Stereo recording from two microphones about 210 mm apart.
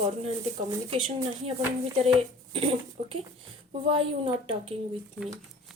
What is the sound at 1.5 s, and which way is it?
Speech, 30° right (ahead or behind).